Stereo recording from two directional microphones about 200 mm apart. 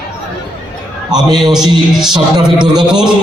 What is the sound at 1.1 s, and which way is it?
Speech, 20° right (ahead or behind).